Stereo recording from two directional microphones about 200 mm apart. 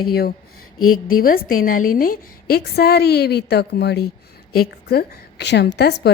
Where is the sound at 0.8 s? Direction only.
90° left.